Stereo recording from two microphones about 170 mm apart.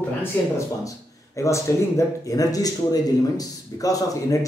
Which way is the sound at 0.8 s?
20° left (ahead or behind).